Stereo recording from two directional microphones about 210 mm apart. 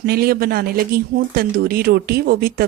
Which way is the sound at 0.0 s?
45° right (ahead or behind).